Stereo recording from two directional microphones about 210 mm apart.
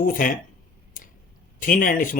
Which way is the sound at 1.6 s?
40° left (ahead or behind).